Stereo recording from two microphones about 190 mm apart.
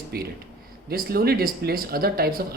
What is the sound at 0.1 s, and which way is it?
A man's voice, 55° right (ahead or behind).